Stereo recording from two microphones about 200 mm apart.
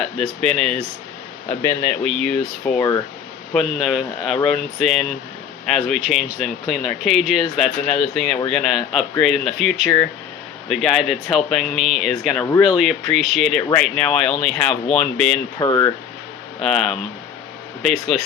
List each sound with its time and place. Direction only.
0.0 s speech: centre (ahead or behind)
15.5 s speech: 20° left (ahead or behind)
16.6 s speech: centre (ahead or behind)